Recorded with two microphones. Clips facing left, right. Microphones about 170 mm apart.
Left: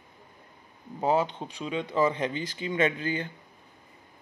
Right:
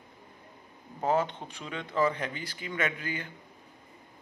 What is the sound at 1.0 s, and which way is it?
Speech, 15° left (ahead or behind).